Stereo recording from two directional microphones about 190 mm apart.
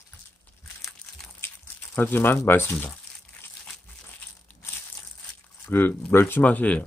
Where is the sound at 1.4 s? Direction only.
10° left (ahead or behind).